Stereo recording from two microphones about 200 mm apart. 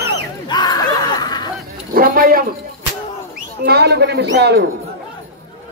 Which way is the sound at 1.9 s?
45° right (ahead or behind).